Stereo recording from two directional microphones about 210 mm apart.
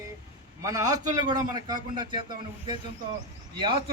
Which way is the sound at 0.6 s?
15° right (ahead or behind).